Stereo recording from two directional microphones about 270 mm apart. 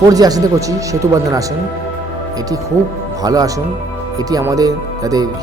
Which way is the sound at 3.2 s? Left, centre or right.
Centre.